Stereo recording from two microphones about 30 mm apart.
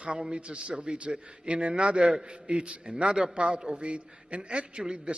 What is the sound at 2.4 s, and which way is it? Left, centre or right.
A man's voice, right.